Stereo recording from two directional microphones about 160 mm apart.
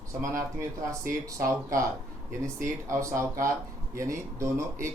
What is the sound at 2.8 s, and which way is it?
Speech, 20° right (ahead or behind).